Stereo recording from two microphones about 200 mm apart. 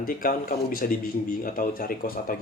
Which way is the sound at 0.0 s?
45° left (ahead or behind).